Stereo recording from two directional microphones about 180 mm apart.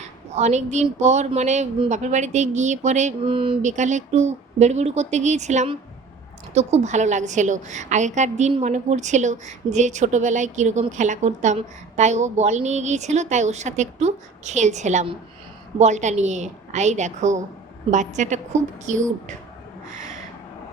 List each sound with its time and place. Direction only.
0.0 s a woman's voice: 40° right (ahead or behind)